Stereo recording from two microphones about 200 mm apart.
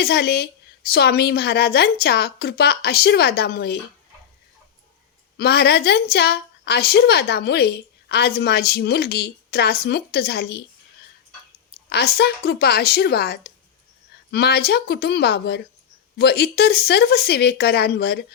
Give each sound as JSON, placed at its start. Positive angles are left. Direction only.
{"t": 0.0, "sound": "a woman's voice", "side_deg": 55}
{"t": 5.4, "sound": "a woman's voice", "side_deg": 55}
{"t": 11.9, "sound": "a woman's voice", "side_deg": 55}